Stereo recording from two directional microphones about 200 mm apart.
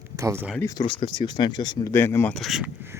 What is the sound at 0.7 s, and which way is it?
Speech, 20° left (ahead or behind).